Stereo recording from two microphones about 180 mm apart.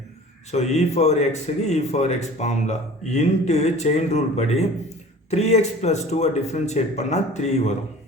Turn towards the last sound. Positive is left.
turn(degrees=40)  # may be behind; listen again after turning